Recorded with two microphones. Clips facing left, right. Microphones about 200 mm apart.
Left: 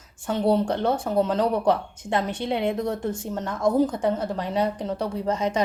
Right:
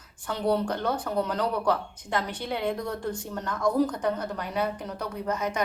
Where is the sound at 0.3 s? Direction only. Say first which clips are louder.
Left 4 dB; 25° left (ahead or behind).